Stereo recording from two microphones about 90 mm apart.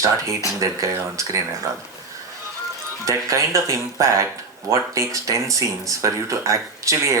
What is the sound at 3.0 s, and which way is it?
Speech, 35° right (ahead or behind).